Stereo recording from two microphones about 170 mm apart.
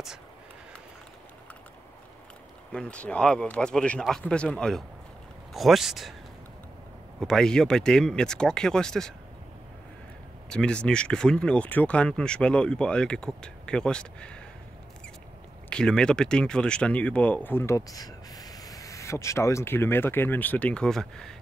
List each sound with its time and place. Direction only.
2.7 s speech: 5° left (ahead or behind)
7.2 s speech: 5° left (ahead or behind)
10.5 s speech: 5° left (ahead or behind)
15.7 s speech: 5° left (ahead or behind)